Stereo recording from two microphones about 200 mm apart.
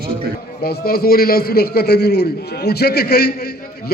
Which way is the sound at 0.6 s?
50° left (ahead or behind).